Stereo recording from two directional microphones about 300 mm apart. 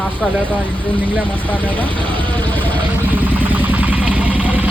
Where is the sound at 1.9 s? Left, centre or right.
Centre.